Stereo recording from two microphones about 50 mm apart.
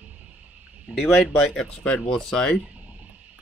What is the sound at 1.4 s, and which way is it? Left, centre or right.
Speech, centre.